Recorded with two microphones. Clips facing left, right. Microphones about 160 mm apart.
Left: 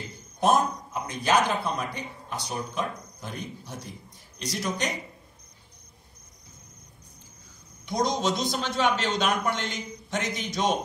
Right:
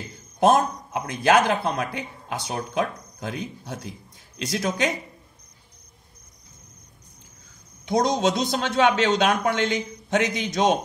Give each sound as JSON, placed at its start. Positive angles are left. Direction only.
{"t": 0.9, "sound": "speech", "side_deg": -90}
{"t": 7.9, "sound": "a man's voice", "side_deg": -60}